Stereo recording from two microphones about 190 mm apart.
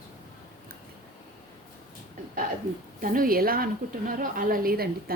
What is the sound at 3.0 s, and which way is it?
A woman's voice, 45° right (ahead or behind).